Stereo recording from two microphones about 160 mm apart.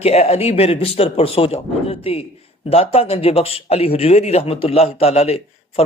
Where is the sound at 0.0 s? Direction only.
40° left (ahead or behind).